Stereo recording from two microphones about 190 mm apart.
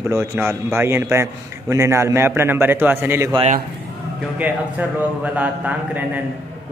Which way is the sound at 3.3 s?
35° right (ahead or behind).